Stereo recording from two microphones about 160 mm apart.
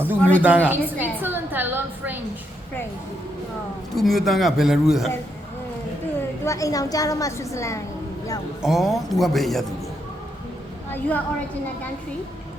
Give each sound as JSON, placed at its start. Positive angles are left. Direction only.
{"t": 0.2, "sound": "a woman's voice", "side_deg": 10}
{"t": 0.4, "sound": "a woman's voice", "side_deg": -10}
{"t": 3.9, "sound": "a man's voice", "side_deg": 0}
{"t": 6.4, "sound": "a woman's voice", "side_deg": 20}
{"t": 8.6, "sound": "a man's voice", "side_deg": 0}
{"t": 10.9, "sound": "a woman's voice", "side_deg": 10}